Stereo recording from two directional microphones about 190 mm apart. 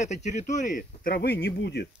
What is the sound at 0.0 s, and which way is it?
Speech, 35° left (ahead or behind).